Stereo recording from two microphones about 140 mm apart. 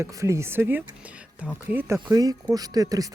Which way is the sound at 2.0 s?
25° right (ahead or behind).